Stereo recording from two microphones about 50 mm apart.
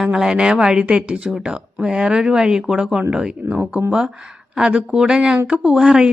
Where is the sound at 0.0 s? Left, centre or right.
Centre.